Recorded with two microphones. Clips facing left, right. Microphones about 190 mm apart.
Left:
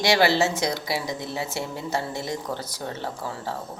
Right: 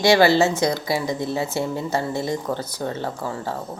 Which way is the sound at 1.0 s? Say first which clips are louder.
Right 6 dB; 55° right (ahead or behind).